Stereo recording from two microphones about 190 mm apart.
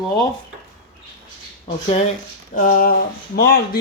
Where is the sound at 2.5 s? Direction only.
45° left (ahead or behind).